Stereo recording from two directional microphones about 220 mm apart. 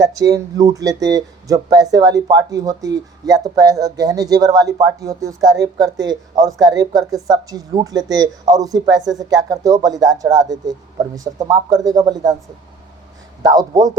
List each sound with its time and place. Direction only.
0.0 s speech: 15° right (ahead or behind)
13.4 s speech: 15° right (ahead or behind)